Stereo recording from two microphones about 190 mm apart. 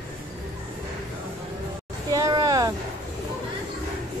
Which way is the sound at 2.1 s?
20° right (ahead or behind).